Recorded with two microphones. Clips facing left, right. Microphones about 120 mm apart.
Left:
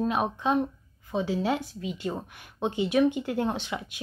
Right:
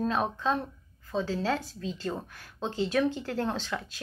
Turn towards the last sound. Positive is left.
turn(degrees=15)  # may be behind; listen again after turning